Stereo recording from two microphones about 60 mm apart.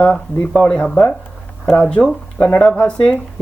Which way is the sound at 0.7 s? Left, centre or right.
Centre.